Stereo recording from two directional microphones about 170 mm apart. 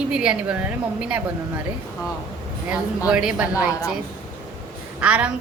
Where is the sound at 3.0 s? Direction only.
5° right (ahead or behind).